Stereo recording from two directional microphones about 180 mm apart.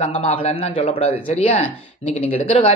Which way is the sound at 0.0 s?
35° left (ahead or behind).